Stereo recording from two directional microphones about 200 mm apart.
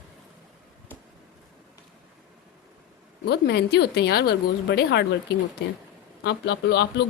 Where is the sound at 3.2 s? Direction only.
55° left (ahead or behind).